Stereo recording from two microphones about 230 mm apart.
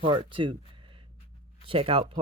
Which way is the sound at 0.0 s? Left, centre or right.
Right.